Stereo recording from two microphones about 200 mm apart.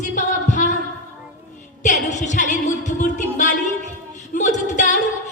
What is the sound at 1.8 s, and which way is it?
Music, 35° left (ahead or behind).